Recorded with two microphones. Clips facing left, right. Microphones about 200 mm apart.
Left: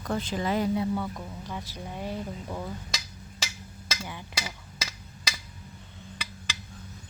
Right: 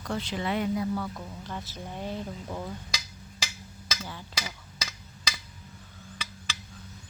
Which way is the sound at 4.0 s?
15° left (ahead or behind).